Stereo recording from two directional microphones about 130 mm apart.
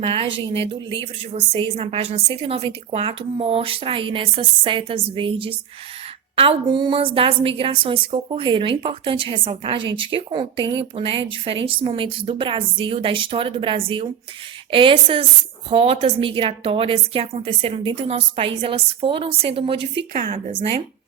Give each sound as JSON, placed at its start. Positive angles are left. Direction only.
{"t": 0.0, "sound": "a woman's voice", "side_deg": -40}